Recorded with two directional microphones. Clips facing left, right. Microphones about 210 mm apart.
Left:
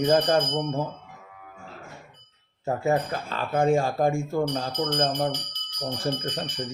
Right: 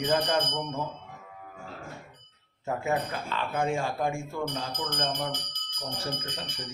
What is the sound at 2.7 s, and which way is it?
Speech, 40° left (ahead or behind).